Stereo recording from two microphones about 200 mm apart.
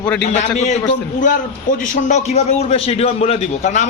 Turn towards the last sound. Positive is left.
turn(degrees=35)  # may be behind; listen again after turning